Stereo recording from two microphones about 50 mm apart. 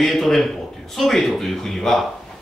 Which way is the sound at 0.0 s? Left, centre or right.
Centre.